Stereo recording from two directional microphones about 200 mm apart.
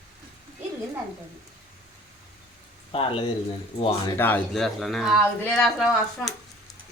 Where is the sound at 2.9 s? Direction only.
25° left (ahead or behind).